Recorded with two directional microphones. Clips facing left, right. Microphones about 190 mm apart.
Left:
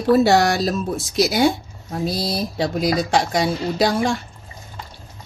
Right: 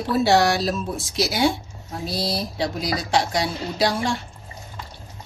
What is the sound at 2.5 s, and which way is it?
A woman's voice, 50° left (ahead or behind).